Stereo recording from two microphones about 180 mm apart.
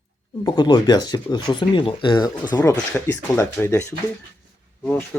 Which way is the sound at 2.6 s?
15° left (ahead or behind).